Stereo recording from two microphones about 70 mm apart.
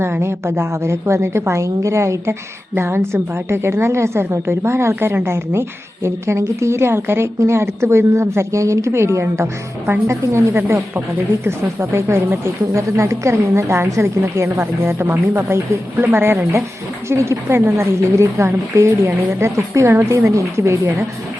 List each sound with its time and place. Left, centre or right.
0.0 s a woman's voice: right